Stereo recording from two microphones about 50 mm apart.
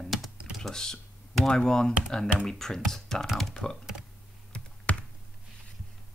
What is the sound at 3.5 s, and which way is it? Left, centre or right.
Speech, centre.